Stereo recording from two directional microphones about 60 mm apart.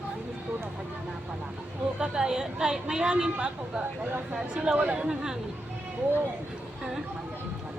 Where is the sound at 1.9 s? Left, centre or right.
Centre.